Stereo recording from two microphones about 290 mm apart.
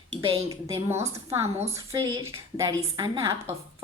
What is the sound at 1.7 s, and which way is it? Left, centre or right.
A woman's voice, centre.